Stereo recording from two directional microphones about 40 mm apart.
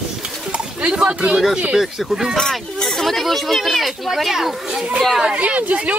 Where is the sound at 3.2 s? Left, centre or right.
Centre.